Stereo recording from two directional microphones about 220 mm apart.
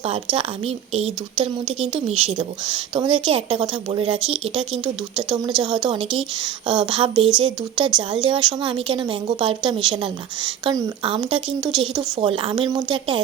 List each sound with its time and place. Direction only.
0.0 s a woman's voice: 25° right (ahead or behind)